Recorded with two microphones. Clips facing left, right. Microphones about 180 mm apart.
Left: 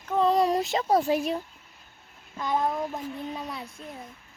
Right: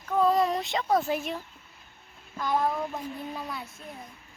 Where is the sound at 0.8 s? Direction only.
25° left (ahead or behind).